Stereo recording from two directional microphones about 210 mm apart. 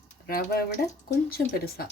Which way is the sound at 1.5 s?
45° left (ahead or behind).